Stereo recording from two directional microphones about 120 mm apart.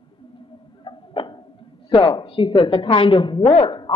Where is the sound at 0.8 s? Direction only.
45° left (ahead or behind).